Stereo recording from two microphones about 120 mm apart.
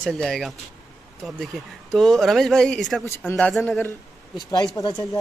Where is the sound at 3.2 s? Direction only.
15° left (ahead or behind).